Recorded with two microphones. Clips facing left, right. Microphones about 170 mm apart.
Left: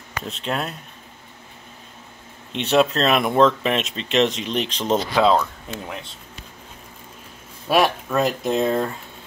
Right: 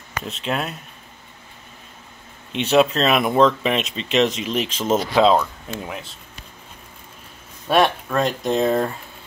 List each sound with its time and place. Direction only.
0.2 s speech: centre (ahead or behind)
2.5 s speech: centre (ahead or behind)
5.1 s speech: 20° right (ahead or behind)
5.4 s speech: 5° right (ahead or behind)
7.6 s speech: 5° left (ahead or behind)